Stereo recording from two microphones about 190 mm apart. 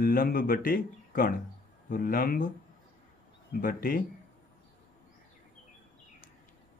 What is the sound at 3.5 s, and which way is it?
Speech, 50° left (ahead or behind).